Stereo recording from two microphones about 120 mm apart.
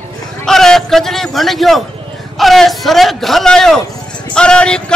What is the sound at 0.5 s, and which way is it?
A man's voice, 5° left (ahead or behind).